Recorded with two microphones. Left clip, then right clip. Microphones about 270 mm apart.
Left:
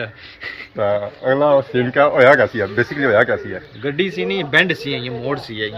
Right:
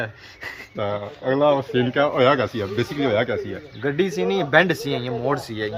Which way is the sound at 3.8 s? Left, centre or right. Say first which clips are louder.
Left 1 dB; centre.